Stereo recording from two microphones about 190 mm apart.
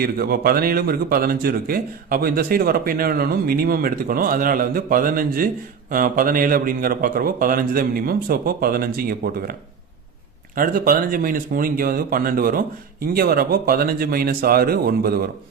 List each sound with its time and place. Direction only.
0.0 s speech: 50° right (ahead or behind)